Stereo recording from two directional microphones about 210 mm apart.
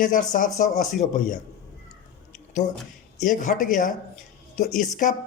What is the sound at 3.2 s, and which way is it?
Speech, 35° left (ahead or behind).